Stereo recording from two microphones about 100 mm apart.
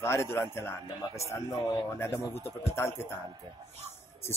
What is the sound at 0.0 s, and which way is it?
Speech, 25° left (ahead or behind).